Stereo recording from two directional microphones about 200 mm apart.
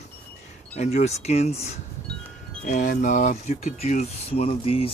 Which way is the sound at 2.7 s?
40° left (ahead or behind).